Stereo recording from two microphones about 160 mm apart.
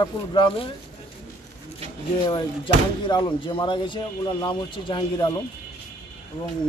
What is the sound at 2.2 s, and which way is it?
Speech, 25° left (ahead or behind).